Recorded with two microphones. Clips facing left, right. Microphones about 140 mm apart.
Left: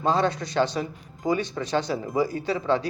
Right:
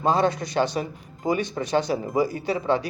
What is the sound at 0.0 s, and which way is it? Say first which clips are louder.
Speech: right 2 dB; 15° right (ahead or behind).